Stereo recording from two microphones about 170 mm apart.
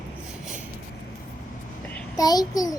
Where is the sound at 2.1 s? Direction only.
20° left (ahead or behind).